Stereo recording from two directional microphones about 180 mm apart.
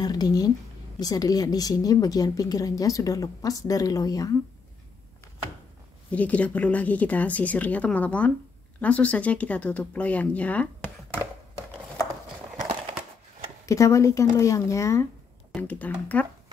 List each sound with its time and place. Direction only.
0.0 s a woman's voice: 20° left (ahead or behind)
6.0 s speech: 10° left (ahead or behind)
13.7 s speech: 15° left (ahead or behind)